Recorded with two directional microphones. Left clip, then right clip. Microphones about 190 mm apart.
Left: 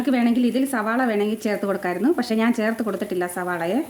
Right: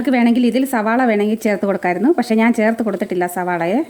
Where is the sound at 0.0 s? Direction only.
40° right (ahead or behind).